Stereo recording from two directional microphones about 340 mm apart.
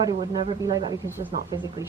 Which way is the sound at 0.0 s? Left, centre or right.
Centre.